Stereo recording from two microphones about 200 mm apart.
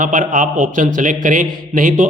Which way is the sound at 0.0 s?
40° right (ahead or behind).